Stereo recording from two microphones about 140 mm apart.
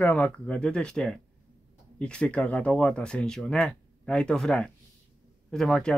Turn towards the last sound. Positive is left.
turn(degrees=5)  # may be behind; listen again after turning